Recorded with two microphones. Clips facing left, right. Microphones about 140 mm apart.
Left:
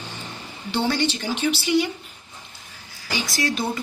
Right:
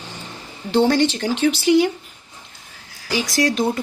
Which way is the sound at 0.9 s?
90° right.